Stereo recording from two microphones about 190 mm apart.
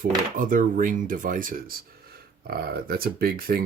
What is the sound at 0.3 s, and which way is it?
Speech, 45° right (ahead or behind).